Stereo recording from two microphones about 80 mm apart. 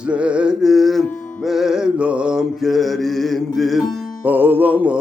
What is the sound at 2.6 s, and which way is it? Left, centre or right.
Music, centre.